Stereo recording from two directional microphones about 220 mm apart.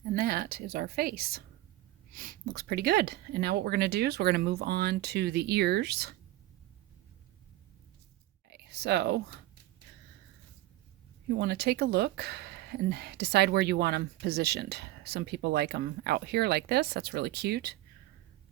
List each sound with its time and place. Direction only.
0.1 s a woman's voice: 45° right (ahead or behind)
8.4 s a sound: 50° right (ahead or behind)
11.3 s speech: 50° right (ahead or behind)